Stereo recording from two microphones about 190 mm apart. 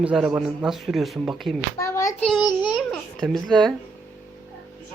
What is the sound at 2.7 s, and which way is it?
Babbling, centre (ahead or behind).